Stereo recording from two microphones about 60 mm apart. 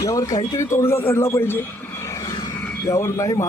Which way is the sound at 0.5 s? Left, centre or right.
Left.